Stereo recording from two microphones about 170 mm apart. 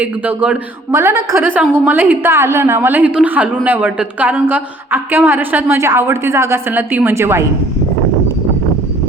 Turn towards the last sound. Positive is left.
turn(degrees=-15)  # may be behind; listen again after turning